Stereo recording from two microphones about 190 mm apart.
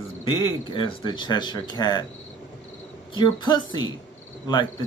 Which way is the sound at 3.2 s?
25° left (ahead or behind).